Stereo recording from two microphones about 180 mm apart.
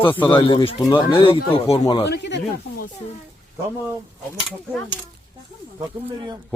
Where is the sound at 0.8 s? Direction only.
20° left (ahead or behind).